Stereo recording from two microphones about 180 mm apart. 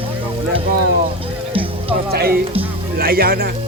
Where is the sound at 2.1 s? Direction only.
60° right (ahead or behind).